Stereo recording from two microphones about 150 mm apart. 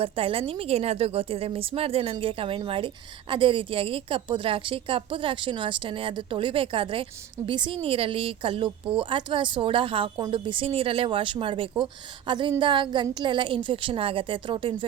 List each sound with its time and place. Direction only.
0.0 s a woman's voice: 40° right (ahead or behind)